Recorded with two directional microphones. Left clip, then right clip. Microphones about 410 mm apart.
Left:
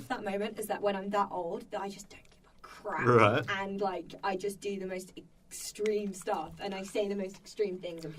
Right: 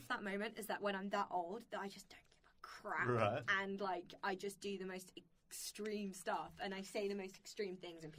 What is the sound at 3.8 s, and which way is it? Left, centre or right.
Speech, left.